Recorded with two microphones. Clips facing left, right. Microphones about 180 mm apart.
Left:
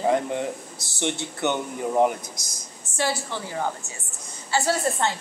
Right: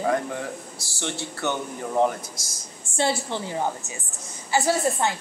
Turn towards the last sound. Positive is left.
turn(degrees=-15)  # may be behind; listen again after turning